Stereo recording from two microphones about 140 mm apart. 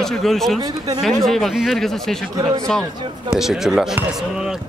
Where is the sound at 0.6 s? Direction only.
25° right (ahead or behind).